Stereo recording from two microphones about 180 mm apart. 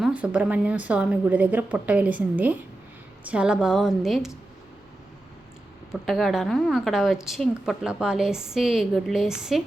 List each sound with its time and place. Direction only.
0.0 s a woman's voice: 5° right (ahead or behind)
5.9 s a woman's voice: centre (ahead or behind)